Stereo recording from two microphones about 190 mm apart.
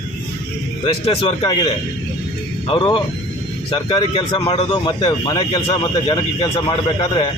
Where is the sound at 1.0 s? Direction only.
25° left (ahead or behind).